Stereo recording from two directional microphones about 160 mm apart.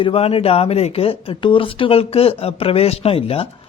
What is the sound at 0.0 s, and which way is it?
Speech, 35° left (ahead or behind).